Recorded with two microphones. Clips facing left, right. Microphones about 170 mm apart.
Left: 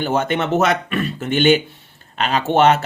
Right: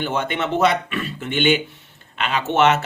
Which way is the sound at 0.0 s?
40° left (ahead or behind).